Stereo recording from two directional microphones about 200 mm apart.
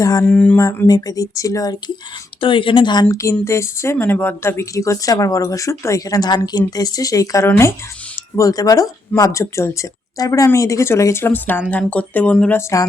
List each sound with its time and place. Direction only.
0.0 s a woman's voice: 15° left (ahead or behind)
0.3 s a woman's voice: 5° left (ahead or behind)